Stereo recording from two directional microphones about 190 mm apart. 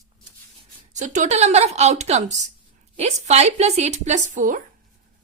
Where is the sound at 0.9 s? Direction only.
40° right (ahead or behind).